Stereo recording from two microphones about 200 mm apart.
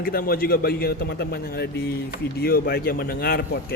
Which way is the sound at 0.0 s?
45° left (ahead or behind).